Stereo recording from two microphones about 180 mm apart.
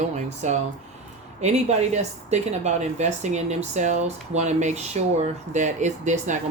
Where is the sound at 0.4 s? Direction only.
40° right (ahead or behind).